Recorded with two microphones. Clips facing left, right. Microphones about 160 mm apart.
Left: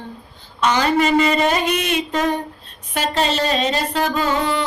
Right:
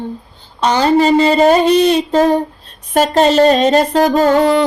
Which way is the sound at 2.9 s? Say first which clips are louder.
Right 10 dB; 45° right (ahead or behind).